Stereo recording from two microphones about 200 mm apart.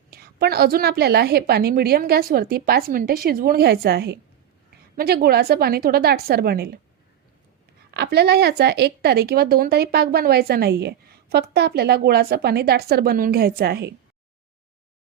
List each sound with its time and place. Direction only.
0.1 s a woman's voice: 50° right (ahead or behind)
7.9 s a woman's voice: 55° right (ahead or behind)